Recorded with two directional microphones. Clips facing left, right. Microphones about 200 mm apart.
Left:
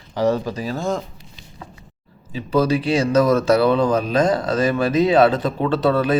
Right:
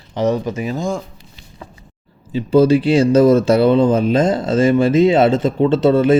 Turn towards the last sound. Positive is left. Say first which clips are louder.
# right 5 dB
turn(degrees=-25)  # may be behind; listen again after turning